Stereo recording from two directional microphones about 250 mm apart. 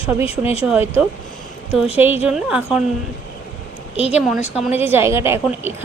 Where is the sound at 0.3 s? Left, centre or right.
Left.